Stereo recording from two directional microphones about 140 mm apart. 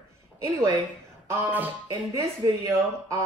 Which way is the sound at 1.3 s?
15° right (ahead or behind).